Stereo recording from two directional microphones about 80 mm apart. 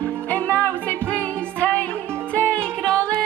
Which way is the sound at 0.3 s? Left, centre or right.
Centre.